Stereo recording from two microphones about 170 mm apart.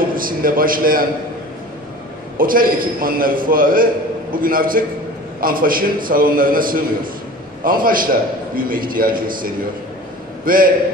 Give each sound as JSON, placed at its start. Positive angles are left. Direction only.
{"t": 0.1, "sound": "a man's voice", "side_deg": -55}
{"t": 2.3, "sound": "a man's voice", "side_deg": -55}